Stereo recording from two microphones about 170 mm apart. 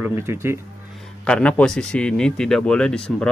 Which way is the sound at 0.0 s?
15° right (ahead or behind).